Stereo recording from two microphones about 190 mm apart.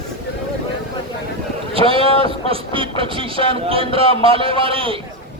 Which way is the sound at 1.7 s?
30° right (ahead or behind).